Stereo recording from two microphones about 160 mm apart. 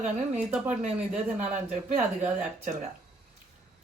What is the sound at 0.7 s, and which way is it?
Speech, 45° right (ahead or behind).